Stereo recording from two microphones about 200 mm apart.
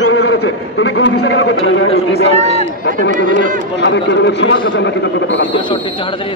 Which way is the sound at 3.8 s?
65° left (ahead or behind).